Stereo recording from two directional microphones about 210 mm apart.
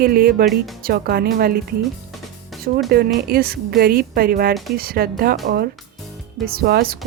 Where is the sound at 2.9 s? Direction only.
45° right (ahead or behind).